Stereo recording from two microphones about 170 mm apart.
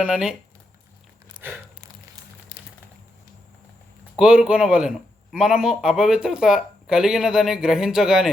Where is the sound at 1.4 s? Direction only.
25° right (ahead or behind).